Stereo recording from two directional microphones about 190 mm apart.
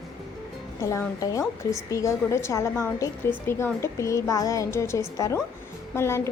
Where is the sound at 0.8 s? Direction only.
15° left (ahead or behind).